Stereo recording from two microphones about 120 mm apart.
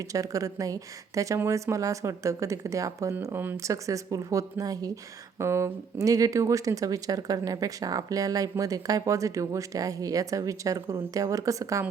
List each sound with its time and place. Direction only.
0.0 s speech: 30° right (ahead or behind)